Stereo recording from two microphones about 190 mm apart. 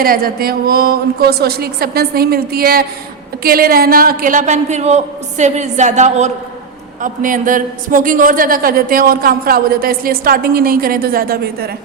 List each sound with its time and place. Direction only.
0.0 s a man's voice: 50° right (ahead or behind)